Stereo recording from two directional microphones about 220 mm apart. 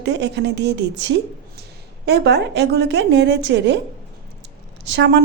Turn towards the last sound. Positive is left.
turn(degrees=-50)  # may be behind; listen again after turning